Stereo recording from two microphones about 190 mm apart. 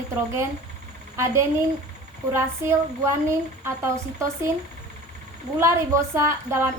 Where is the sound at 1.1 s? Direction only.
15° right (ahead or behind).